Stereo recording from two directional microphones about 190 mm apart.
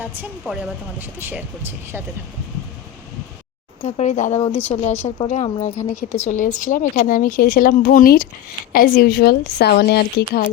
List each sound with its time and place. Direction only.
0.0 s a woman's voice: 5° right (ahead or behind)
3.8 s a woman's voice: 40° left (ahead or behind); by 10.4 s 55° left (ahead or behind)